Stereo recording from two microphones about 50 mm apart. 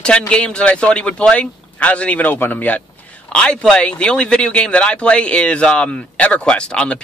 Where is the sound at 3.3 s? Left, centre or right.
Centre.